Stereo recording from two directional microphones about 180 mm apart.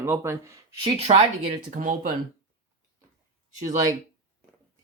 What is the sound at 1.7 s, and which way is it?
Speech, 45° right (ahead or behind).